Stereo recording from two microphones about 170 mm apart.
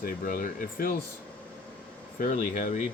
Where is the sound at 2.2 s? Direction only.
45° left (ahead or behind).